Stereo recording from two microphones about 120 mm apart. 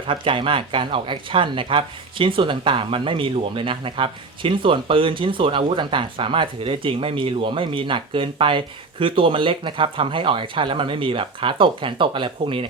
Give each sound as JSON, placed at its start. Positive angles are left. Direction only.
{"t": 0.1, "sound": "speech", "side_deg": -45}